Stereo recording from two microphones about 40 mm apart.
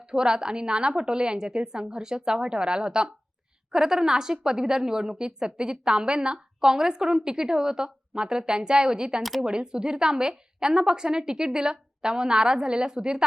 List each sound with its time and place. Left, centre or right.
0.0 s a woman's voice: centre